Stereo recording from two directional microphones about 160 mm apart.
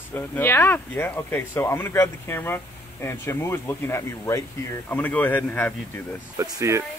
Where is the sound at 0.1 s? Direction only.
15° left (ahead or behind).